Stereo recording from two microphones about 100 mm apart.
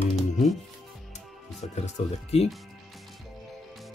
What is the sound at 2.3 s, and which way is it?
Speech, 90° left.